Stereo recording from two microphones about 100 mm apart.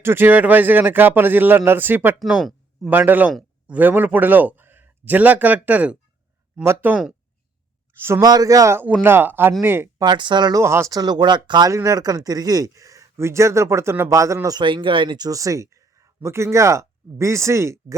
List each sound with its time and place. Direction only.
0.0 s speech: 25° right (ahead or behind)
2.1 s speech: 5° right (ahead or behind)
2.9 s a man's voice: 15° right (ahead or behind)
8.2 s a man's voice: 40° right (ahead or behind)
8.8 s speech: 20° right (ahead or behind)
10.0 s speech: 50° right (ahead or behind)
10.6 s speech: 25° right (ahead or behind); by 11.7 s 50° right (ahead or behind)
11.7 s a man's voice: 35° right (ahead or behind)
14.6 s speech: 55° right (ahead or behind)
15.3 s speech: 35° right (ahead or behind)